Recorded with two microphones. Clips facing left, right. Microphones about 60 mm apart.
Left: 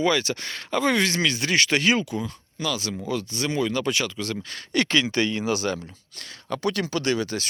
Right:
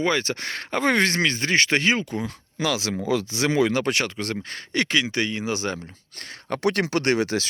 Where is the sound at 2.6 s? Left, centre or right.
Right.